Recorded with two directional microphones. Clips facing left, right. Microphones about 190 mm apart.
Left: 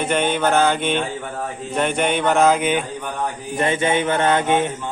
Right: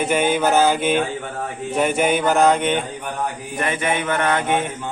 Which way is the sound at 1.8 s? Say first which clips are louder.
Right 1 dB; 5° right (ahead or behind).